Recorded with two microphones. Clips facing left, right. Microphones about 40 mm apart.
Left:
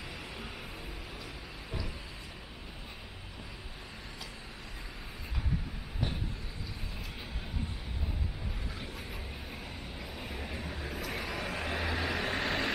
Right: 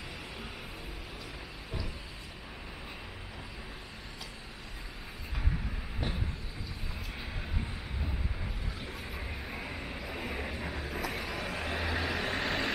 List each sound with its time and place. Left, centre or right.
9.5 s vehicle: right
10.7 s vehicle: centre